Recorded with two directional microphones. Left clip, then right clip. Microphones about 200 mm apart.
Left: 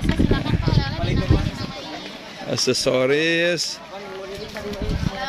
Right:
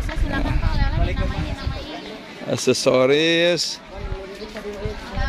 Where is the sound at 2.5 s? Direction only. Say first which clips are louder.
Right 2 dB; 15° right (ahead or behind).